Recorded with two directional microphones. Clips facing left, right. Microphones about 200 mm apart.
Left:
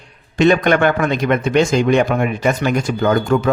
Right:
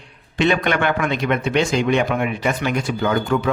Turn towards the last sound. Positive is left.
turn(degrees=45)  # may be behind; listen again after turning